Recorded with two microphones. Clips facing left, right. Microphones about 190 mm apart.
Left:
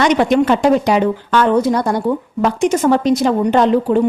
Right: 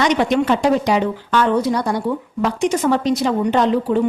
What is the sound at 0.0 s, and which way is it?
A woman's voice, 55° left (ahead or behind).